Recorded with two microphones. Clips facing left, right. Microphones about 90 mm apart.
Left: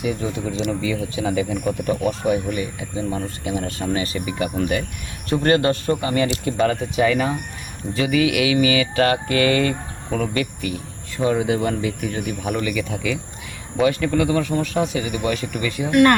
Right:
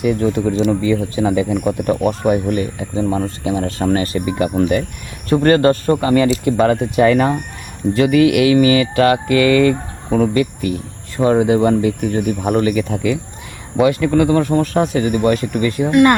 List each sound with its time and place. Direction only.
0.0 s speech: 55° right (ahead or behind); by 3.8 s 30° right (ahead or behind)
3.8 s speech: 50° right (ahead or behind)
5.3 s speech: 35° right (ahead or behind)
9.3 s speech: 30° left (ahead or behind)
9.6 s speech: 30° right (ahead or behind)
15.9 s speech: 20° right (ahead or behind)